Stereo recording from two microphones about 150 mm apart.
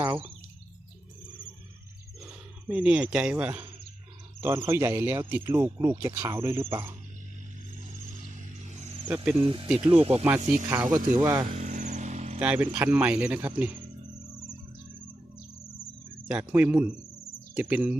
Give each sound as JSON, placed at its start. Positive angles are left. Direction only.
{"t": 1.3, "sound": "a sound", "side_deg": 35}
{"t": 2.2, "sound": "speech", "side_deg": -10}
{"t": 5.5, "sound": "speech", "side_deg": -25}
{"t": 9.0, "sound": "speech", "side_deg": -10}
{"t": 9.4, "sound": "speech", "side_deg": -35}
{"t": 9.6, "sound": "speech", "side_deg": -5}
{"t": 9.9, "sound": "speech", "side_deg": -40}
{"t": 10.9, "sound": "speech", "side_deg": -20}
{"t": 11.4, "sound": "vehicle", "side_deg": -50}
{"t": 12.4, "sound": "speech", "side_deg": -10}
{"t": 16.2, "sound": "speech", "side_deg": -10}